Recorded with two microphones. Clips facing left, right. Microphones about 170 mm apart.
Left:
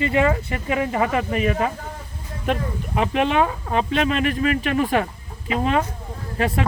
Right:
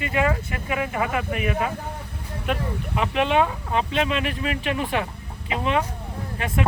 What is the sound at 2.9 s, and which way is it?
Speech, 40° left (ahead or behind).